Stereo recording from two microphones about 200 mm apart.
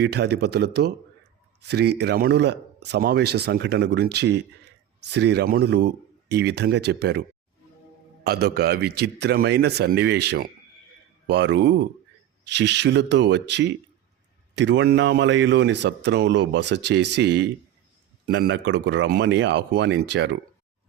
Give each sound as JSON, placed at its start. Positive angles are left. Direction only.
{"t": 0.0, "sound": "speech", "side_deg": -55}
{"t": 8.2, "sound": "speech", "side_deg": -55}